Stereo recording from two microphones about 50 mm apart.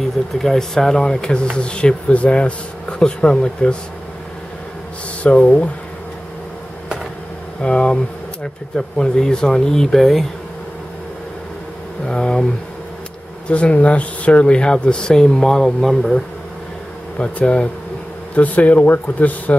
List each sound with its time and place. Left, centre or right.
0.4 s speech: centre
5.2 s speech: left
7.6 s speech: centre
12.1 s speech: centre
13.5 s speech: left; by 16.2 s centre
17.2 s speech: left